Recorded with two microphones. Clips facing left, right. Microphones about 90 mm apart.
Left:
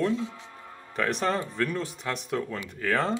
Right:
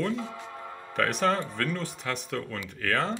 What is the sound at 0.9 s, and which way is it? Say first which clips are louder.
Speech: right 1 dB; centre (ahead or behind).